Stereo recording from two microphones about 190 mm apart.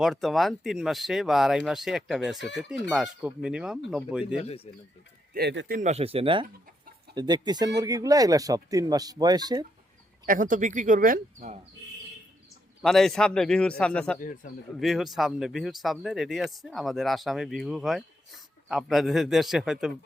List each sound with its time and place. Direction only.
0.0 s speech: centre (ahead or behind)
4.4 s speech: 30° left (ahead or behind)
5.3 s speech: 60° right (ahead or behind)
5.8 s speech: 35° right (ahead or behind)
10.2 s speech: 45° right (ahead or behind)
12.8 s speech: centre (ahead or behind)